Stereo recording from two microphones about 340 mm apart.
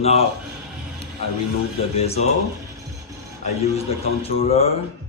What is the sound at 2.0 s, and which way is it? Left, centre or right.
Speech, centre.